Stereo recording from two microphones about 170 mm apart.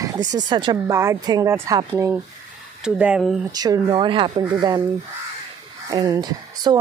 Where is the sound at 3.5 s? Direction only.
20° right (ahead or behind).